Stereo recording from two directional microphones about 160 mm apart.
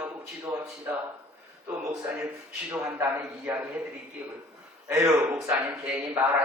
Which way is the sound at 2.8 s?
15° right (ahead or behind).